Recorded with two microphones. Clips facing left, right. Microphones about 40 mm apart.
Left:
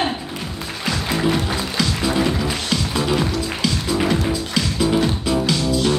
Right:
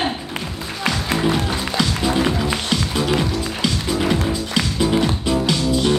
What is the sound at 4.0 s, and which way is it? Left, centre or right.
Music, centre.